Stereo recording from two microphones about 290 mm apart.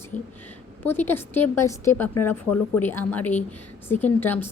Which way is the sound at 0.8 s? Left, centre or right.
Centre.